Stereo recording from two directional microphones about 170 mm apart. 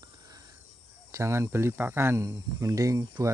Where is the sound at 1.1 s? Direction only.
15° right (ahead or behind).